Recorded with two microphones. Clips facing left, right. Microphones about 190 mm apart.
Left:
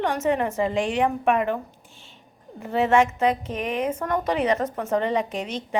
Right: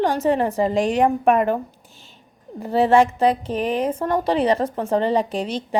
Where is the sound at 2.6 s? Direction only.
35° right (ahead or behind).